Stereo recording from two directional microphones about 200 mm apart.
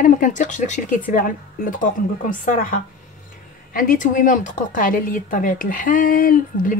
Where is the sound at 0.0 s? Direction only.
40° left (ahead or behind).